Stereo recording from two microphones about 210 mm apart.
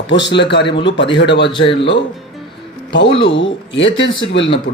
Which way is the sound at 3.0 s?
25° left (ahead or behind).